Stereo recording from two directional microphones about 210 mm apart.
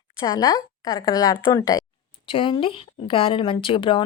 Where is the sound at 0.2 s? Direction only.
15° left (ahead or behind).